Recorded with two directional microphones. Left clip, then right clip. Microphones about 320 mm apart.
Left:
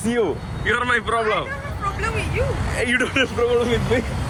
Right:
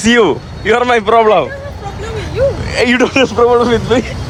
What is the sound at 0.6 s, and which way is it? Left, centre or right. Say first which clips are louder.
Speech: right 9 dB; centre.